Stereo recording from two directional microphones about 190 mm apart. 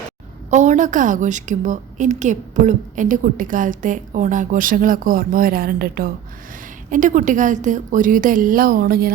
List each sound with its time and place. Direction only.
0.5 s a woman's voice: 40° right (ahead or behind)